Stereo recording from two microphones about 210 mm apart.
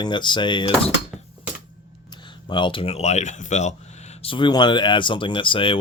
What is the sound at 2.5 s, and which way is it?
Speech, 25° left (ahead or behind).